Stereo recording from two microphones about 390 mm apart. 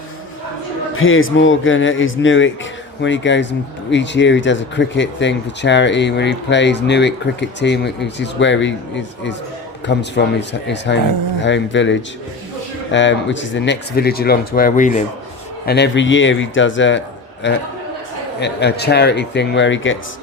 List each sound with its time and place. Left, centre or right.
0.9 s speech: left
9.8 s speech: left